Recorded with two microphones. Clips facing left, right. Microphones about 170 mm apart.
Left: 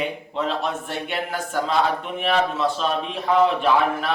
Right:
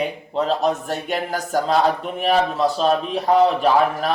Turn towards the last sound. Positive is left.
turn(degrees=-40)  # may be behind; listen again after turning